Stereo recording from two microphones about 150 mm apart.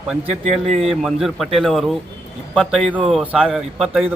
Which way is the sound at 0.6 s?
45° right (ahead or behind).